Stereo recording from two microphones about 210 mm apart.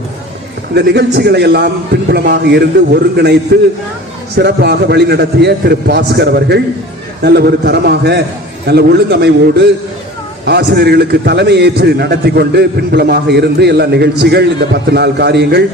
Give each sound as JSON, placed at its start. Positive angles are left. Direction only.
{"t": 0.7, "sound": "a man's voice", "side_deg": -50}